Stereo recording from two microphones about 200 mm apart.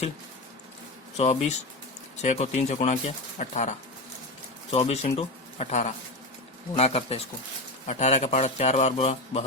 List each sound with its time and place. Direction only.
1.1 s a man's voice: 35° left (ahead or behind)